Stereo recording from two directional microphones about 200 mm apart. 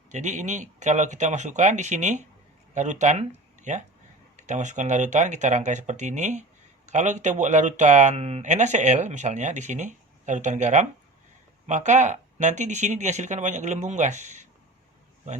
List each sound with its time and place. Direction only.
0.1 s speech: 35° right (ahead or behind)